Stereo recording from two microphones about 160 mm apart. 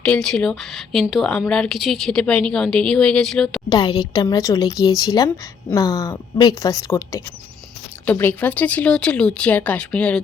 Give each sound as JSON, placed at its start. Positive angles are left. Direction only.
{"t": 0.0, "sound": "a woman's voice", "side_deg": 5}
{"t": 3.7, "sound": "a woman's voice", "side_deg": 25}
{"t": 8.0, "sound": "speech", "side_deg": 10}